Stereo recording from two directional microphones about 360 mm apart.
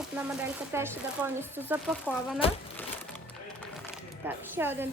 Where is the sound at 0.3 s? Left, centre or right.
Centre.